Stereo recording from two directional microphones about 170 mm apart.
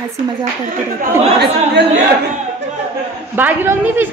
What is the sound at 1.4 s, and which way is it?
Speech, 85° right.